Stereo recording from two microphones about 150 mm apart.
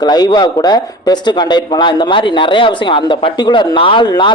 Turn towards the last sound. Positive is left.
turn(degrees=30)  # may be behind; listen again after turning